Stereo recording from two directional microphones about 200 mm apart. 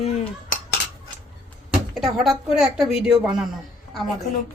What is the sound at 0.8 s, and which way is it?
Cutlery, 60° left (ahead or behind).